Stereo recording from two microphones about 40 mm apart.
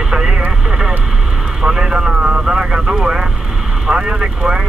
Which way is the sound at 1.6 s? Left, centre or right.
Centre.